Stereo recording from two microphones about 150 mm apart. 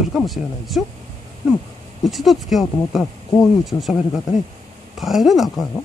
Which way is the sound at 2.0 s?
Centre (ahead or behind).